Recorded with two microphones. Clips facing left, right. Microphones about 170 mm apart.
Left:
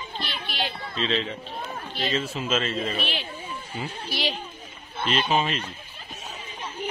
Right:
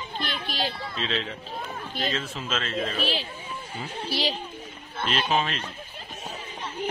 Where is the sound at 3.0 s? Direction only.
35° right (ahead or behind).